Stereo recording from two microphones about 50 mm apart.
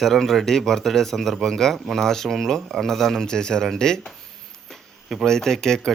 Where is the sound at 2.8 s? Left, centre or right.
Centre.